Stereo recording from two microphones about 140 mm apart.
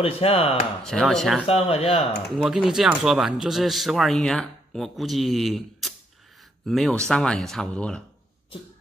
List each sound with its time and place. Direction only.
0.0 s speech: 45° left (ahead or behind)
0.8 s speech: 5° left (ahead or behind)
1.5 s speech: 45° left (ahead or behind)
2.0 s speech: centre (ahead or behind)